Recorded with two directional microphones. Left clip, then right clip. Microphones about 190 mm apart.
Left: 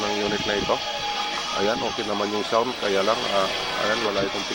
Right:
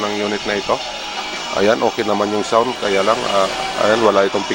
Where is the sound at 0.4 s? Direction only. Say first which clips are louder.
Right 4 dB; 5° right (ahead or behind).